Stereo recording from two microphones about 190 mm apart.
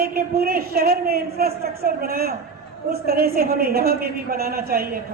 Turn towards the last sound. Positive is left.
turn(degrees=-50)  # may be behind; listen again after turning